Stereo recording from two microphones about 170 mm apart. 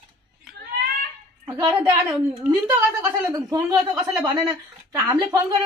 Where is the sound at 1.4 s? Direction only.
20° right (ahead or behind).